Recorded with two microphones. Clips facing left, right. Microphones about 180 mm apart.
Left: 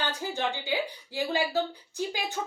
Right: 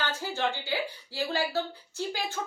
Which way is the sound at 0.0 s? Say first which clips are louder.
Even; 15° left (ahead or behind).